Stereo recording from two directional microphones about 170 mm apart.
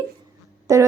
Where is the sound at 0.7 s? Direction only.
20° right (ahead or behind).